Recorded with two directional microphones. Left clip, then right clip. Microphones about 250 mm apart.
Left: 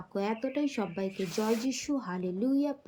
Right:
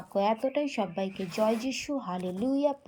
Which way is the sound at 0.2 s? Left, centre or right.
Centre.